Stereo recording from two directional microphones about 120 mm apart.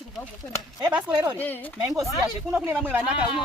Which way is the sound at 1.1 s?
35° right (ahead or behind).